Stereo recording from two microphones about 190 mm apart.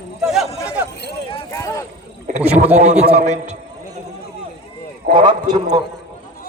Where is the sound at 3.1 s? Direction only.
35° right (ahead or behind).